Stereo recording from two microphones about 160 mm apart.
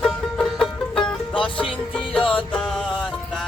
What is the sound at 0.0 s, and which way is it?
Music, centre (ahead or behind).